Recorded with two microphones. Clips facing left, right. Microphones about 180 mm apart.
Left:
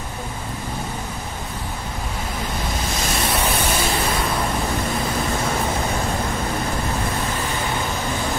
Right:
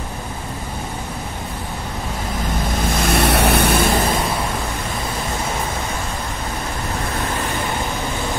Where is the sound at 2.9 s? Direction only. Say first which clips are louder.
Right 8 dB; 60° right (ahead or behind).